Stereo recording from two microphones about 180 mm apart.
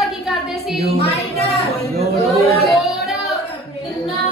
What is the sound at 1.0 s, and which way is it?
Speech, 35° left (ahead or behind).